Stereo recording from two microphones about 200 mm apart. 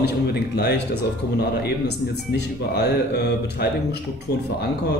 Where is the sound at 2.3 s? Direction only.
55° left (ahead or behind).